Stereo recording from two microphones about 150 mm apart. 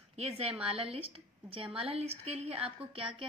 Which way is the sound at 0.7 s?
40° right (ahead or behind).